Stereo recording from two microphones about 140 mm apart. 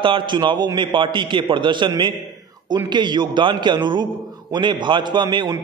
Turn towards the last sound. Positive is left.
turn(degrees=-35)  # may be behind; listen again after turning